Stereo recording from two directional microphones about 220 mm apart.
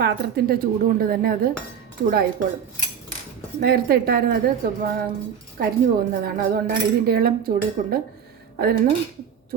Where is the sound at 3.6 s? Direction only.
45° right (ahead or behind).